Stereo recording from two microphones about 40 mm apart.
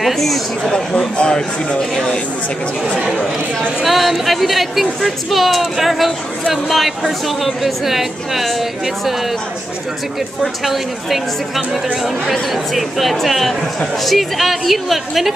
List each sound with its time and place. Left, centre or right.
0.0 s a woman's voice: centre
0.7 s speech: left
3.8 s a woman's voice: centre
10.4 s a woman's voice: centre